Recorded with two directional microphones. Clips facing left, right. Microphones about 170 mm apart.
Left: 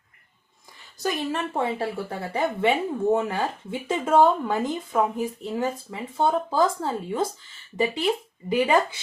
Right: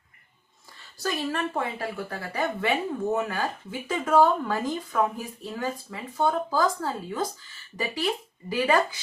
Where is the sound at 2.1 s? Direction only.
25° left (ahead or behind).